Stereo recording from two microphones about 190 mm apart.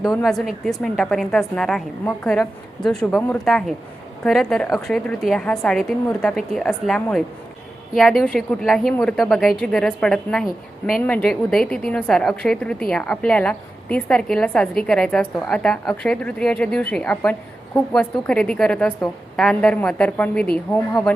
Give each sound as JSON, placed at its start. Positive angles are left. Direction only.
{"t": 0.2, "sound": "a woman's voice", "side_deg": 0}